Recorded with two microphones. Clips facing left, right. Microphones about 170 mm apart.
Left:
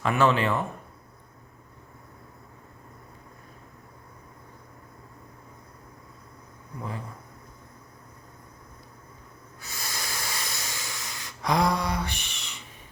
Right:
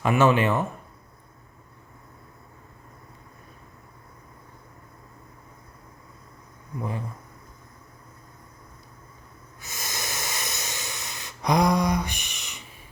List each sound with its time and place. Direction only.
0.0 s speech: 15° right (ahead or behind)
9.6 s hiss: 20° right (ahead or behind)